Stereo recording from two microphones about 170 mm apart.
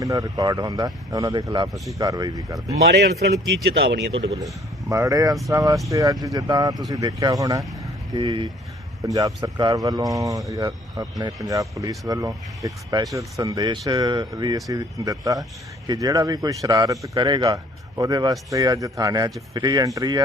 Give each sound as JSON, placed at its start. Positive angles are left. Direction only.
{"t": 0.0, "sound": "a man's voice", "side_deg": -20}
{"t": 1.7, "sound": "speech", "side_deg": 0}
{"t": 2.0, "sound": "a man's voice", "side_deg": -25}
{"t": 2.9, "sound": "a man's voice", "side_deg": -70}
{"t": 4.9, "sound": "a man's voice", "side_deg": -20}